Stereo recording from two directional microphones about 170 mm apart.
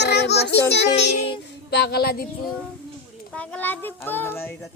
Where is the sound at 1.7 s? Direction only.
70° left (ahead or behind).